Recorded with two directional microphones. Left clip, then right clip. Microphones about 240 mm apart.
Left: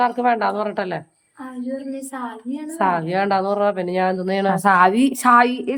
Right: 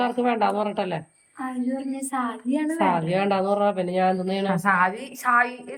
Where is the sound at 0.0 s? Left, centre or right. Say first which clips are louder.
Left 4 dB; centre.